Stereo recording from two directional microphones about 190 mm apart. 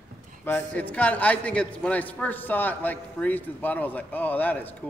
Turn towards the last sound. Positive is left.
turn(degrees=10)  # may be behind; listen again after turning